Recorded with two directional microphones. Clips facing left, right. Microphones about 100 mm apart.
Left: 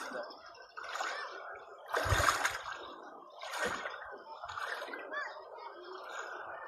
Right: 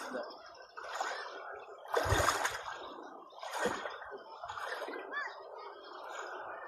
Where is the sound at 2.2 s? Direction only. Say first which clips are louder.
Even; 15° left (ahead or behind).